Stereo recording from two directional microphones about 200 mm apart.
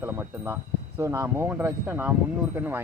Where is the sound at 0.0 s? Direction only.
10° right (ahead or behind).